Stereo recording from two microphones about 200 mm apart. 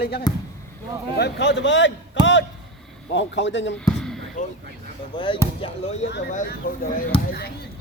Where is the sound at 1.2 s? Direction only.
60° left (ahead or behind).